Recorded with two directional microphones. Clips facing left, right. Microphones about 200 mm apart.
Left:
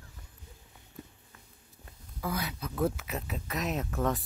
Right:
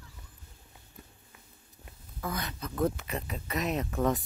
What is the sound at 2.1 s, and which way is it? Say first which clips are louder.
Speech: left 1 dB; 10° left (ahead or behind).